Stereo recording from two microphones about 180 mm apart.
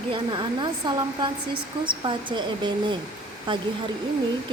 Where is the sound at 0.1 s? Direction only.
25° right (ahead or behind).